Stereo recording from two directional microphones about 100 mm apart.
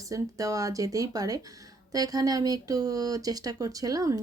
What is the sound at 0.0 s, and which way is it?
Speech, 35° right (ahead or behind).